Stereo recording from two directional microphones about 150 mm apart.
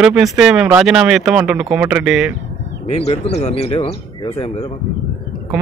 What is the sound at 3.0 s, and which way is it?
A man's voice, 45° left (ahead or behind).